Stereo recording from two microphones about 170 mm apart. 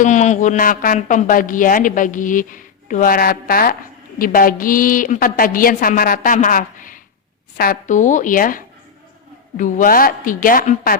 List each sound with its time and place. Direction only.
0.0 s a woman's voice: 45° left (ahead or behind)